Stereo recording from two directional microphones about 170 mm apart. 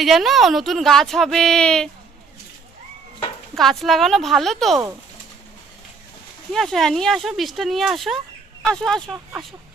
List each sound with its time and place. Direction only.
0.0 s a woman's voice: centre (ahead or behind)
3.5 s a woman's voice: centre (ahead or behind)
6.5 s a woman's voice: centre (ahead or behind)